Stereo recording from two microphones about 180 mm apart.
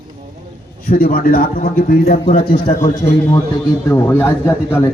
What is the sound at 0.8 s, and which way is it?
A man's voice, 55° left (ahead or behind).